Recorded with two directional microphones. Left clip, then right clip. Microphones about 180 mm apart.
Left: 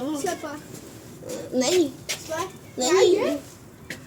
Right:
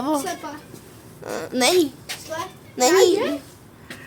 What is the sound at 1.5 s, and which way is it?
A woman's voice, 35° right (ahead or behind).